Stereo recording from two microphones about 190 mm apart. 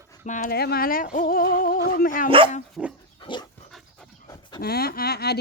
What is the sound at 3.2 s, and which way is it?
Dog, 25° left (ahead or behind).